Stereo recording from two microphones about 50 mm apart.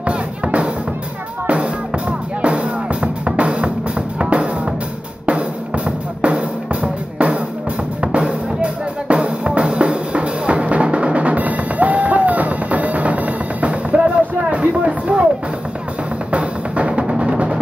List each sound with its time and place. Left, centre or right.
0.0 s music: right
5.9 s drum: right
8.0 s music: right
16.3 s music: right